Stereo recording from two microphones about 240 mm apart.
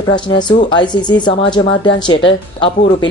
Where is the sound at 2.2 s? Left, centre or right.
Left.